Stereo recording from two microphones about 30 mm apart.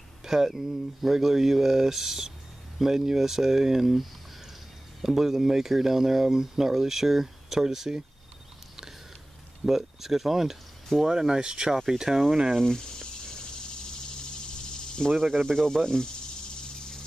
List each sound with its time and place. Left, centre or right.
0.2 s a sound: centre
0.5 s speech: centre
5.0 s speech: centre
9.7 s speech: centre
12.5 s snake: centre
15.1 s speech: centre
15.4 s speech: centre